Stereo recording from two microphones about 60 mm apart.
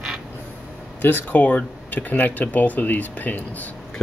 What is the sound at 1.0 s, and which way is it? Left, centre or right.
Speech, left.